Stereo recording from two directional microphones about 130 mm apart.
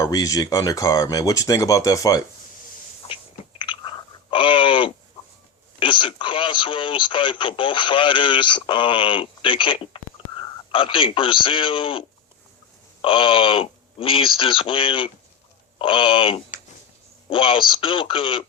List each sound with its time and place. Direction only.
0.0 s speech: 25° left (ahead or behind)
3.0 s chewing: 50° left (ahead or behind)
3.6 s a sound: 40° left (ahead or behind)
5.8 s speech: 40° left (ahead or behind)